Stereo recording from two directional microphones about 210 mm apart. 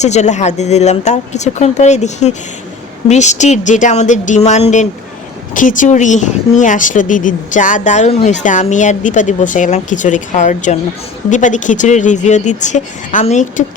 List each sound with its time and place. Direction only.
0.0 s speech: 35° left (ahead or behind)